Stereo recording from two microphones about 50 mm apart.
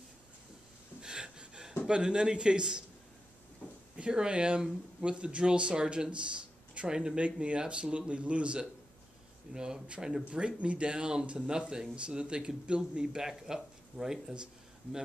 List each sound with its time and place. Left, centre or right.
1.0 s a sound: centre
1.9 s speech: centre
3.9 s speech: centre